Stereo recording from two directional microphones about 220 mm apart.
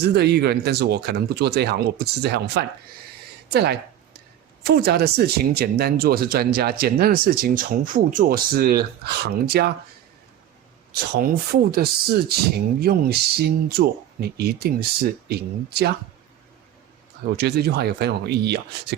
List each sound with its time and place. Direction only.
0.1 s speech: 45° right (ahead or behind)
3.5 s a sound: 45° right (ahead or behind)
4.6 s speech: 45° right (ahead or behind)
10.9 s speech: 45° right (ahead or behind)
17.3 s speech: 45° right (ahead or behind)